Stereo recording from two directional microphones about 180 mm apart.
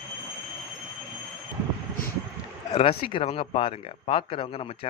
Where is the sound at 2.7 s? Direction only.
30° left (ahead or behind).